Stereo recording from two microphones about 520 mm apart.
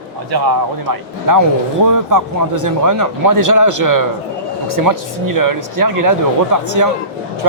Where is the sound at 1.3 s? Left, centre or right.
Right.